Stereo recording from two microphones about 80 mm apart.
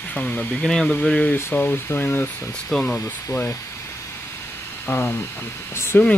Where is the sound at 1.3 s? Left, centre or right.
Left.